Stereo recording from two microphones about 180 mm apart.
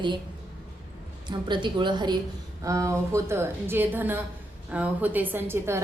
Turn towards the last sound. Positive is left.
turn(degrees=-15)  # may be behind; listen again after turning